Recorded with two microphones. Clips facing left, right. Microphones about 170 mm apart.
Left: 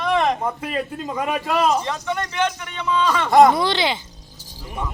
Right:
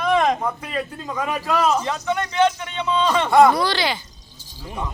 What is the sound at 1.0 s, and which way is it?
Speech, 15° left (ahead or behind).